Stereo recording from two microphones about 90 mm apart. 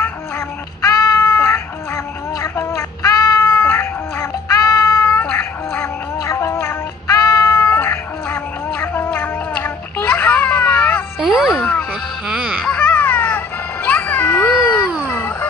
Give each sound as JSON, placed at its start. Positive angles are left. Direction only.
{"t": 0.8, "sound": "a sound", "side_deg": 40}
{"t": 2.5, "sound": "music", "side_deg": 30}
{"t": 3.4, "sound": "music", "side_deg": 25}
{"t": 5.2, "sound": "music", "side_deg": 10}
{"t": 5.8, "sound": "music", "side_deg": 35}
{"t": 11.1, "sound": "music", "side_deg": -5}
{"t": 12.6, "sound": "baby cry", "side_deg": 15}
{"t": 13.8, "sound": "music", "side_deg": 20}